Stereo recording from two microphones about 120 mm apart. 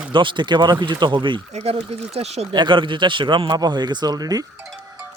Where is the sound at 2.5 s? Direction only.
40° right (ahead or behind).